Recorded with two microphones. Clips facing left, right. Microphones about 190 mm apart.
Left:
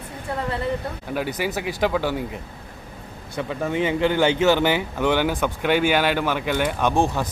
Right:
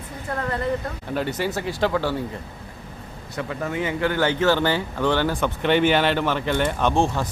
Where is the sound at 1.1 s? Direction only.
10° left (ahead or behind).